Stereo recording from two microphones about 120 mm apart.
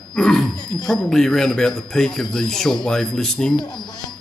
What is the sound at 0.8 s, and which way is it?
Speech, 5° left (ahead or behind).